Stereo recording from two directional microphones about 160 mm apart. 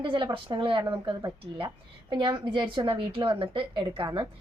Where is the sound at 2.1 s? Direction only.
30° right (ahead or behind).